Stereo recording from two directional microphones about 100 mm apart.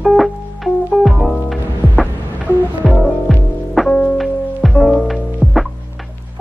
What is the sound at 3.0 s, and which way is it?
Music, centre (ahead or behind).